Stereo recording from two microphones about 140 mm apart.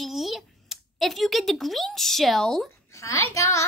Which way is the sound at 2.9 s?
20° left (ahead or behind).